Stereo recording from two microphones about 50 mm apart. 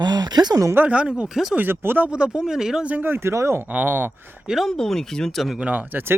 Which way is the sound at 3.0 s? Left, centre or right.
Right.